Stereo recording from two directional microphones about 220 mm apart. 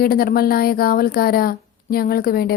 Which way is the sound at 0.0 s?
40° left (ahead or behind).